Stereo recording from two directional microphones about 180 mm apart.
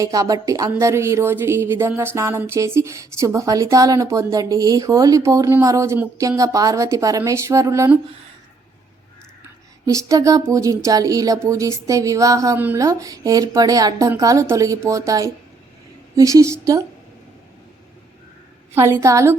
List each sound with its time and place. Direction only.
0.0 s speech: 20° right (ahead or behind)
9.8 s speech: 15° right (ahead or behind)
18.7 s speech: 15° right (ahead or behind)